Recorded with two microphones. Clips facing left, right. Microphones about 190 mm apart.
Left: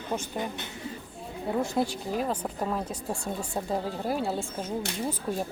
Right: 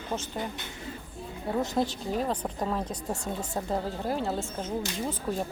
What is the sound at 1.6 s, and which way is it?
Speech, 10° left (ahead or behind).